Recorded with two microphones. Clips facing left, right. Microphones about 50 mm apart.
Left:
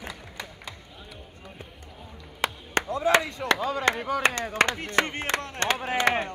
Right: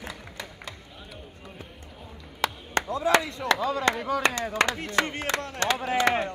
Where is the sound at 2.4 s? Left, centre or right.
Left.